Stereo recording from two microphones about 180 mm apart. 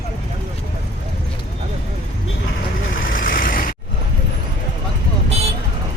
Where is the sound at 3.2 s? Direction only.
50° left (ahead or behind).